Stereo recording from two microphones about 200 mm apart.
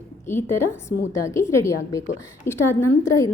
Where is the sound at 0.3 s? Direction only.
15° left (ahead or behind).